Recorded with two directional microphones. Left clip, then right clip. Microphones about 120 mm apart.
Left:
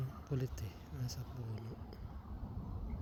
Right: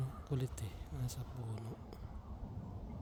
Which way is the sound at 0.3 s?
30° right (ahead or behind).